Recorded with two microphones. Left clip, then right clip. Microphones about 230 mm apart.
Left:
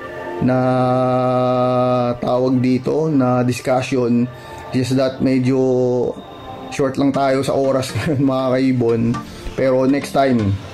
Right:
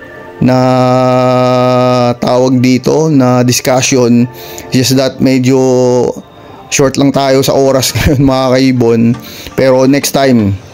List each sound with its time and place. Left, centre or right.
0.5 s mantra: right
4.7 s speech: right